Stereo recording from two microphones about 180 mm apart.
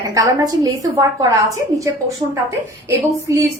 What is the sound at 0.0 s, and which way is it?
A woman's voice, 20° right (ahead or behind).